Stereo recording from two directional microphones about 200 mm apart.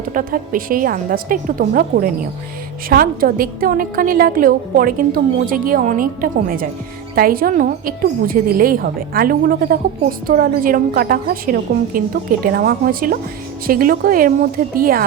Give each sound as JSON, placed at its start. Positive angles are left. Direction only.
{"t": 0.1, "sound": "a woman's voice", "side_deg": -45}